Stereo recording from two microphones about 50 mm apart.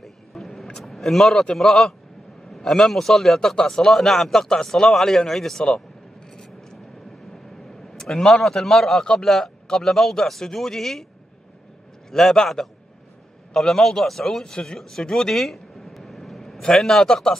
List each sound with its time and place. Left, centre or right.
0.0 s vehicle: centre
0.7 s a man's voice: centre
7.9 s a man's voice: centre
12.1 s a man's voice: centre
14.8 s vehicle: centre
16.7 s a man's voice: centre